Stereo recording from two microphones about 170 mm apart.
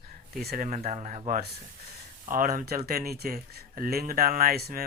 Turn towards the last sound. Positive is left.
turn(degrees=-65)  # may be behind; listen again after turning